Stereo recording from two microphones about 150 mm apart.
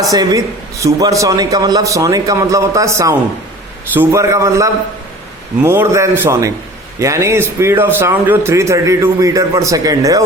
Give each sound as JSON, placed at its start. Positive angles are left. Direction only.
{"t": 0.1, "sound": "a man's voice", "side_deg": -25}